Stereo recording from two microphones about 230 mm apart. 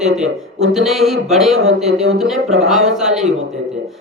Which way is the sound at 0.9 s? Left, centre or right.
Centre.